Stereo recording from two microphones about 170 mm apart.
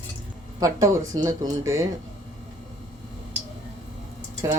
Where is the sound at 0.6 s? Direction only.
20° right (ahead or behind).